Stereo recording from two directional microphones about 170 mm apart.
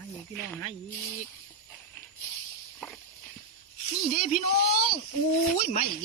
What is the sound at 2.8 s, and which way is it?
Walk, centre (ahead or behind).